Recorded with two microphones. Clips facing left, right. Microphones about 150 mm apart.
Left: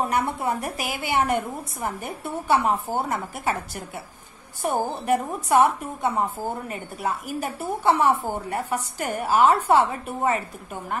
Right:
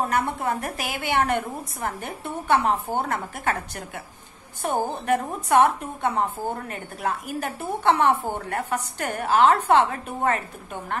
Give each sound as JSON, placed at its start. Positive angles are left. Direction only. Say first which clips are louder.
{"t": 0.1, "sound": "a woman's voice", "louder": "even", "side_deg": 10}